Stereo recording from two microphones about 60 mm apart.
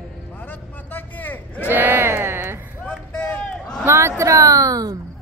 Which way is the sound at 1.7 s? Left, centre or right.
Right.